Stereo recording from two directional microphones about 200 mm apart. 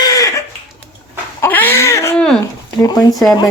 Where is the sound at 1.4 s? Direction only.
10° left (ahead or behind).